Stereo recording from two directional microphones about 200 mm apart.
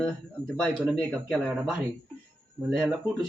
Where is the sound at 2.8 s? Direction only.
Centre (ahead or behind).